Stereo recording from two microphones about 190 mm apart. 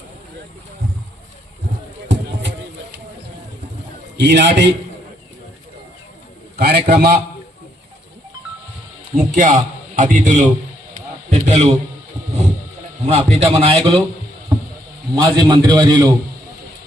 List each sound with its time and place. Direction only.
2.1 s a sound: 70° right (ahead or behind)
4.2 s a man's voice: 65° right (ahead or behind)
6.6 s a man's voice: 55° right (ahead or behind)
9.1 s a man's voice: 40° right (ahead or behind)
10.9 s a sound: 35° right (ahead or behind)
13.1 s a man's voice: 30° right (ahead or behind)
15.1 s a man's voice: 20° right (ahead or behind)